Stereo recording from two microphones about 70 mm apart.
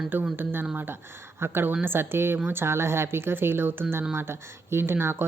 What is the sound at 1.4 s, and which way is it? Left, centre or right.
Speech, right.